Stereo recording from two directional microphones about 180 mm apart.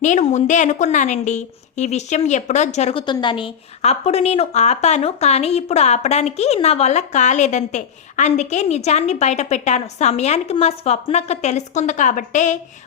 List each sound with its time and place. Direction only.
0.0 s a woman's voice: 45° left (ahead or behind)
3.1 s a woman's voice: 25° left (ahead or behind); by 12.5 s 45° left (ahead or behind)